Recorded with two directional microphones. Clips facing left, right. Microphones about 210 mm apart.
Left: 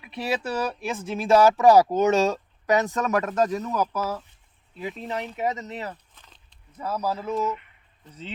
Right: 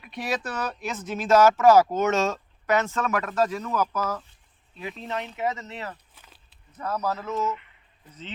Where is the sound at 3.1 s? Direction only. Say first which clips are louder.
Left 2 dB; 20° left (ahead or behind); by 5.2 s centre (ahead or behind).